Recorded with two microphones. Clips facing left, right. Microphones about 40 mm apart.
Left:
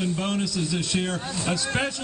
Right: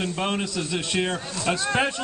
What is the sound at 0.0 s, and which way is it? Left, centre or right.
A man's voice, right.